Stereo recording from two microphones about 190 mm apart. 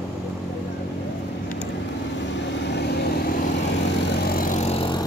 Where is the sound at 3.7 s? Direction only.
60° left (ahead or behind); by 5.0 s 25° left (ahead or behind).